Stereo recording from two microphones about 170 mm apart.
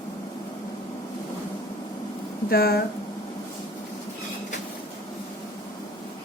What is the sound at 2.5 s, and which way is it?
Speech, 65° left (ahead or behind).